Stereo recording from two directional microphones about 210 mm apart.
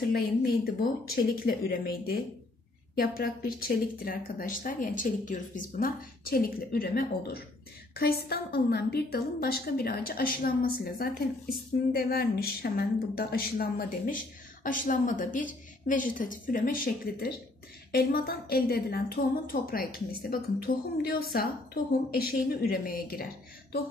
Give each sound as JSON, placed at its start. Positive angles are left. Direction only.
{"t": 0.1, "sound": "a woman's voice", "side_deg": 45}